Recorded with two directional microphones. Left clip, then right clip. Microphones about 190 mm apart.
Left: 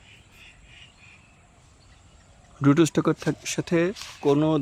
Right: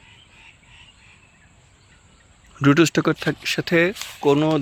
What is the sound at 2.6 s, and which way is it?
Speech, 5° right (ahead or behind).